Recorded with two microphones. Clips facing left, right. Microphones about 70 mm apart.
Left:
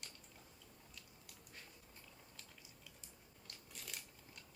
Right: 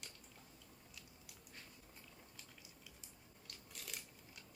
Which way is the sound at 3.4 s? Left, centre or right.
Centre.